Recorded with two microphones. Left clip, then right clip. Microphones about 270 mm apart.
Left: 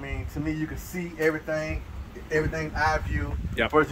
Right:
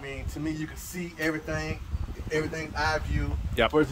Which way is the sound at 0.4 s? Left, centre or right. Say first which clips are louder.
Left 3 dB; centre.